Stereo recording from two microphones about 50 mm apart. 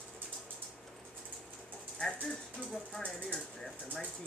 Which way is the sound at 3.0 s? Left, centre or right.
Centre.